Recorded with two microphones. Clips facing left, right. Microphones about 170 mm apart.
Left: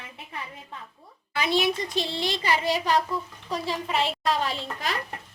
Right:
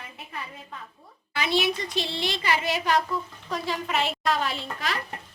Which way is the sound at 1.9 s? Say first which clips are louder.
Left 1 dB; 45° left (ahead or behind).